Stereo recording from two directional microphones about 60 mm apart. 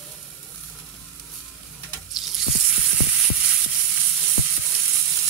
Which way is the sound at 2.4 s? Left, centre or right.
Centre.